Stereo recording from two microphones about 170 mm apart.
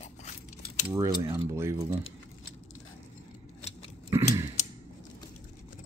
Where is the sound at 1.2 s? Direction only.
15° right (ahead or behind).